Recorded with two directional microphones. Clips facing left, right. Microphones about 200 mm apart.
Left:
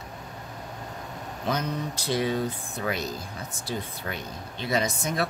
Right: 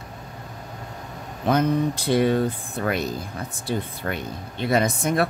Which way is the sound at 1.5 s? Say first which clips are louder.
Right 9 dB; 55° right (ahead or behind).